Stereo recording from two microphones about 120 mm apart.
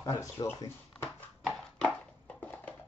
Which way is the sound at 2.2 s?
15° left (ahead or behind).